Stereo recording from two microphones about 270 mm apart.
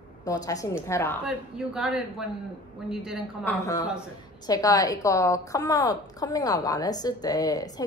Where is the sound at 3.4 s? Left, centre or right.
Centre.